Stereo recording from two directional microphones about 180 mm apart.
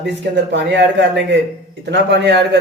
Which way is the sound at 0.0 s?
75° right (ahead or behind).